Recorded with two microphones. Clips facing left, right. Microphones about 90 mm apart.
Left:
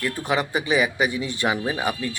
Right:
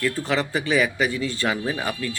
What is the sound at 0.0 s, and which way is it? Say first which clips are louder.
Speech: even; 15° left (ahead or behind).